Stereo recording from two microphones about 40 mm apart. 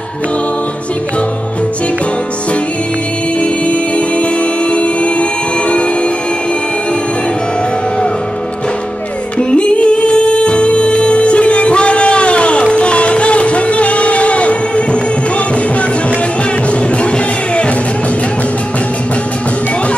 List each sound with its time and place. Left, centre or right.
4.2 s music: left
9.4 s music: left